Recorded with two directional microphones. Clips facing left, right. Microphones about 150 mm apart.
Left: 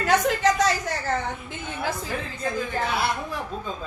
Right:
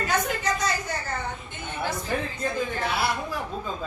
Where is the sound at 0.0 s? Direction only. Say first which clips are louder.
Left 6 dB; 90° left.